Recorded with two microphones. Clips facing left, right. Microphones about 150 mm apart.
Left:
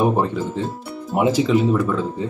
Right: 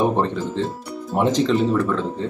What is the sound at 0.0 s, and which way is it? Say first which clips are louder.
Speech: left 1 dB; 5° left (ahead or behind).